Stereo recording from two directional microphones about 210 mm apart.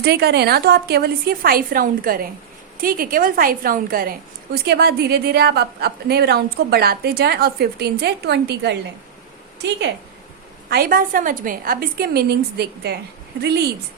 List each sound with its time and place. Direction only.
0.0 s a woman's voice: 50° right (ahead or behind)
10.7 s a woman's voice: 45° right (ahead or behind)